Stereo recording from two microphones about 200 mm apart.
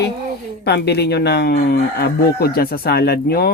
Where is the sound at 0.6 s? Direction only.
55° left (ahead or behind).